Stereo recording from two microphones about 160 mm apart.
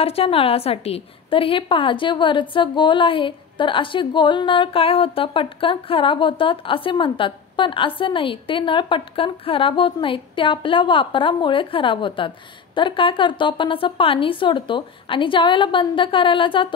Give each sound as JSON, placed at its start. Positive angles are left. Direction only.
{"t": 0.0, "sound": "a woman's voice", "side_deg": 35}